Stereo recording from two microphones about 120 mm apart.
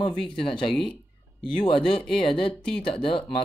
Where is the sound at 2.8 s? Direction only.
45° left (ahead or behind).